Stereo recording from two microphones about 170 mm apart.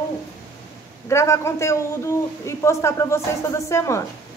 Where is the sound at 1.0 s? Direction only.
15° left (ahead or behind).